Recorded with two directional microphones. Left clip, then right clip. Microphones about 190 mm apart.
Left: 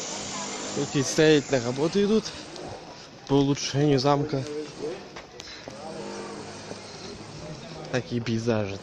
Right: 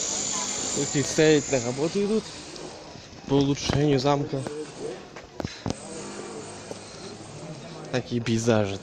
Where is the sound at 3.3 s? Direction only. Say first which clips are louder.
Even; centre (ahead or behind).